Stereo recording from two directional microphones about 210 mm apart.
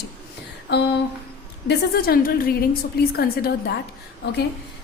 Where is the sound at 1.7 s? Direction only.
50° left (ahead or behind).